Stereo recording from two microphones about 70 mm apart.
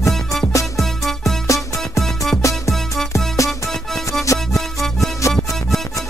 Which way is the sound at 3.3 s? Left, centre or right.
Left.